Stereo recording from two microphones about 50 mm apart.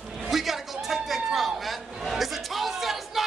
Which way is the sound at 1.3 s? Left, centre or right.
Centre.